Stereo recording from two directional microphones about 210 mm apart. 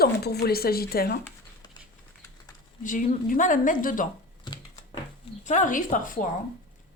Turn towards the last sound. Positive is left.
turn(degrees=40)  # may be behind; listen again after turning